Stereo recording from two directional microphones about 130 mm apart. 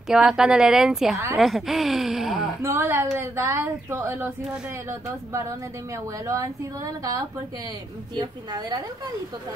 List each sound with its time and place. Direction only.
0.1 s speech: 5° right (ahead or behind)
1.1 s speech: 25° right (ahead or behind)
1.4 s speech: centre (ahead or behind)
2.6 s a woman's voice: 20° right (ahead or behind)